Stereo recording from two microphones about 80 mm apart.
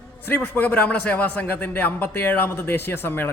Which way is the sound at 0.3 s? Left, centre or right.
Left.